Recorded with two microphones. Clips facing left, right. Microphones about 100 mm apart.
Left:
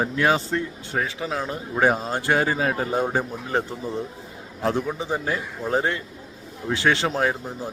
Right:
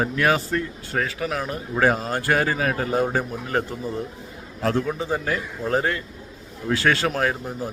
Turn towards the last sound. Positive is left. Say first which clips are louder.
# even
turn(degrees=20)  # may be behind; listen again after turning